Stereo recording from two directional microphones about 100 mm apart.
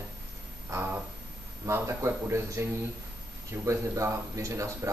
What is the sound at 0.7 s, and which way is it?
Speech, 35° right (ahead or behind).